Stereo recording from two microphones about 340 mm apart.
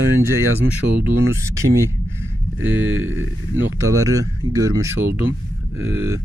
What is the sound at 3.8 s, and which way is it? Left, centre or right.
Speech, centre.